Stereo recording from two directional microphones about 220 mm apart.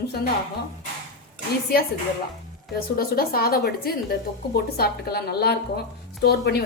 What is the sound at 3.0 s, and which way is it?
Speech, 45° left (ahead or behind).